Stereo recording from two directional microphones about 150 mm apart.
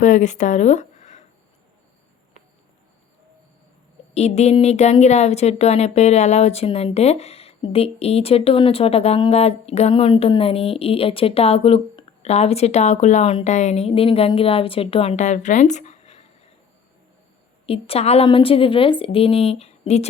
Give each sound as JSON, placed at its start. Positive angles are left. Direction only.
{"t": 0.0, "sound": "speech", "side_deg": 55}
{"t": 4.1, "sound": "speech", "side_deg": 45}
{"t": 17.7, "sound": "speech", "side_deg": 40}